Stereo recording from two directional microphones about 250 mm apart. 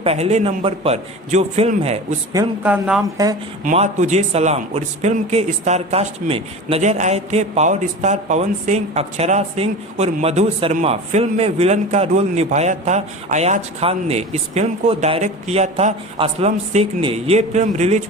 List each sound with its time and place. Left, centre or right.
0.0 s a man's voice: right
2.3 s a woman's voice: centre
3.6 s a man's voice: right